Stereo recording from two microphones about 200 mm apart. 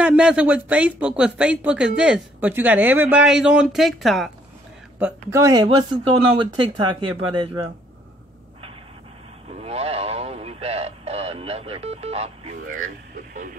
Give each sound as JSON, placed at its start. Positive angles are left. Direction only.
{"t": 0.0, "sound": "speech", "side_deg": -5}
{"t": 4.9, "sound": "speech", "side_deg": -10}
{"t": 9.6, "sound": "radio", "side_deg": -30}
{"t": 12.8, "sound": "a sound", "side_deg": -40}